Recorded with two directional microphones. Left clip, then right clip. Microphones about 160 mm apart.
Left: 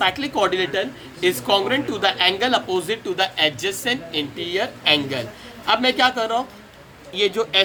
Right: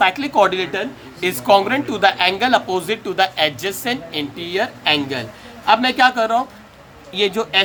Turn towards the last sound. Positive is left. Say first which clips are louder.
# right 1 dB
turn(degrees=-65)  # may be behind; listen again after turning